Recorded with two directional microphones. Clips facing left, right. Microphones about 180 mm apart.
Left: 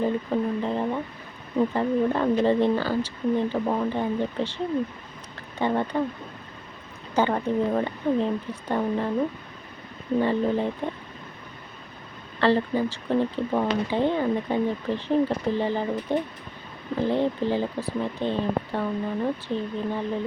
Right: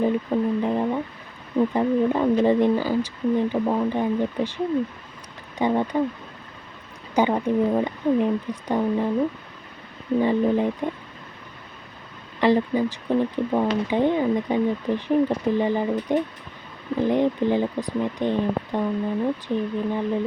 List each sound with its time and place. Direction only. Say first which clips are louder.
0.0 s speech: right 3 dB; 15° right (ahead or behind)
7.2 s speech: right 3 dB; 15° right (ahead or behind)
10.2 s speech: right 3 dB; 15° right (ahead or behind)
12.4 s speech: right 2 dB; 15° right (ahead or behind)